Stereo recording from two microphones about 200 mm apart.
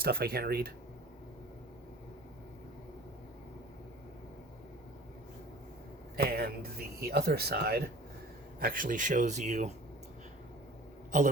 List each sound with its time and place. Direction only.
0.0 s speech: 50° right (ahead or behind)
6.1 s speech: 50° right (ahead or behind)